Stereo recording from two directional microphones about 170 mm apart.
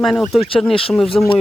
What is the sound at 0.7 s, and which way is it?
Speech, 35° left (ahead or behind).